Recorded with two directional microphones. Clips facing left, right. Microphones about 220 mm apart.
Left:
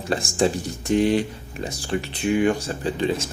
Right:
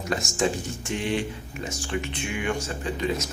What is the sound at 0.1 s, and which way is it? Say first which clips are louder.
Speech: left 4 dB; 30° left (ahead or behind).